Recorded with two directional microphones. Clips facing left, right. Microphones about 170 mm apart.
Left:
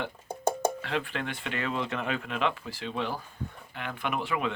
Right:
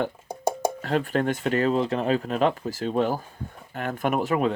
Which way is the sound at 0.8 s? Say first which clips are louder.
Right 8 dB; 40° right (ahead or behind).